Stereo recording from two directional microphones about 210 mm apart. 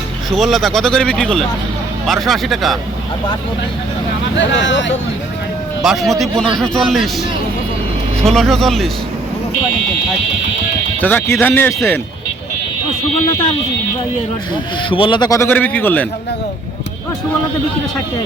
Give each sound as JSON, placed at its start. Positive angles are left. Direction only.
{"t": 0.3, "sound": "speech", "side_deg": 0}
{"t": 4.4, "sound": "speech", "side_deg": 60}
{"t": 5.8, "sound": "speech", "side_deg": 0}
{"t": 8.3, "sound": "speech", "side_deg": 0}
{"t": 11.0, "sound": "a man's voice", "side_deg": 10}
{"t": 14.5, "sound": "a man's voice", "side_deg": 25}